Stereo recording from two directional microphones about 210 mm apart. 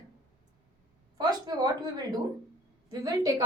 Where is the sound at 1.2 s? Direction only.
20° right (ahead or behind).